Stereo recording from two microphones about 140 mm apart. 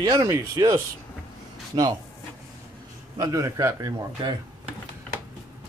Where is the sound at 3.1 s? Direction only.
25° right (ahead or behind).